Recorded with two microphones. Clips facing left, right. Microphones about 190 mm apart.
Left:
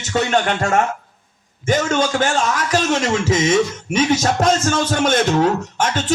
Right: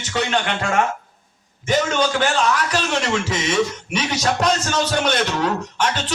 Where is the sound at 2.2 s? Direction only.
45° left (ahead or behind).